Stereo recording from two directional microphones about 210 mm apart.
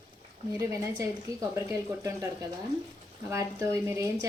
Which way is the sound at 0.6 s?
15° right (ahead or behind).